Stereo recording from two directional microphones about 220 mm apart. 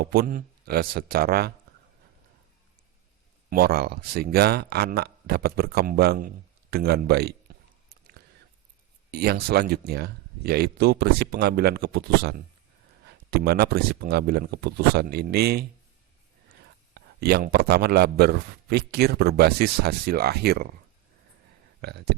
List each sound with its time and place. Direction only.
0.0 s speech: 45° right (ahead or behind)
3.5 s speech: 45° right (ahead or behind)
9.1 s speech: 45° right (ahead or behind)
16.9 s speech: 45° right (ahead or behind)
21.8 s speech: 50° right (ahead or behind)